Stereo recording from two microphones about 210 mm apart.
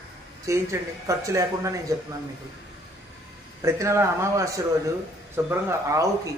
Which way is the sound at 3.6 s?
15° right (ahead or behind).